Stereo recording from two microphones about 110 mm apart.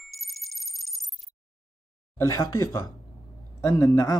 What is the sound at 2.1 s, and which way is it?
Speech, 30° left (ahead or behind).